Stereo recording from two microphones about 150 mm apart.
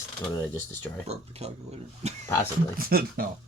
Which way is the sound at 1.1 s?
45° right (ahead or behind).